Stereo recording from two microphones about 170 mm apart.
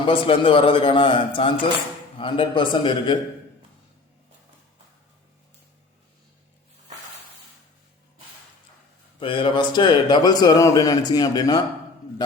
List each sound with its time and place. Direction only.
0.1 s a man's voice: 30° left (ahead or behind)
9.2 s a man's voice: 30° left (ahead or behind)